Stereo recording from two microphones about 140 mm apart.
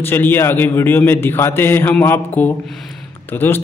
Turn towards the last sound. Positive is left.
turn(degrees=15)  # may be behind; listen again after turning